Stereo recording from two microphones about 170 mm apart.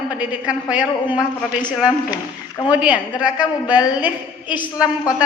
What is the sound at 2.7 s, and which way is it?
A woman's voice, 5° right (ahead or behind).